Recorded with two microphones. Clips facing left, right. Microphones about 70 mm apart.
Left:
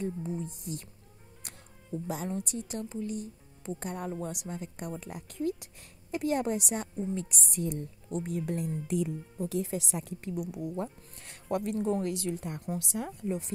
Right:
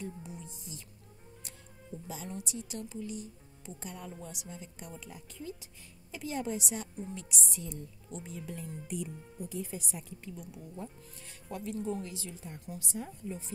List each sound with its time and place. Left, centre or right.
0.0 s speech: left
1.9 s a woman's voice: left